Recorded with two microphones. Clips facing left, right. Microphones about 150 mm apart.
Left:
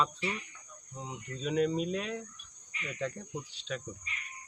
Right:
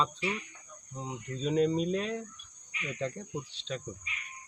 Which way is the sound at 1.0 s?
35° right (ahead or behind).